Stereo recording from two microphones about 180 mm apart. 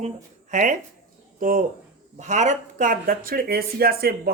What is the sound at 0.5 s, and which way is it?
Speech, 45° right (ahead or behind).